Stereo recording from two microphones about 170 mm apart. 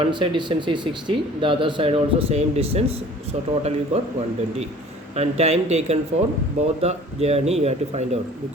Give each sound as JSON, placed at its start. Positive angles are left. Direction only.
{"t": 0.0, "sound": "speech", "side_deg": -30}
{"t": 5.1, "sound": "speech", "side_deg": -40}